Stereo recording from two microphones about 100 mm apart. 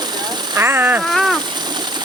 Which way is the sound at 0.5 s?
25° right (ahead or behind).